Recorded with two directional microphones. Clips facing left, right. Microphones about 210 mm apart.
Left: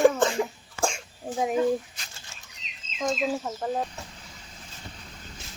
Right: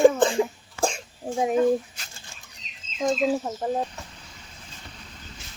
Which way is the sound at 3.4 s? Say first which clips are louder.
Right 2 dB; 20° right (ahead or behind).